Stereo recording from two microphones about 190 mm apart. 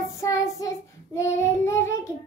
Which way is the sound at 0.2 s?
15° left (ahead or behind).